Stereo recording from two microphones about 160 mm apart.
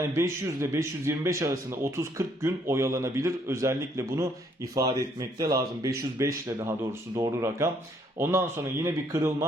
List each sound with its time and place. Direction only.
0.1 s a man's voice: 15° right (ahead or behind)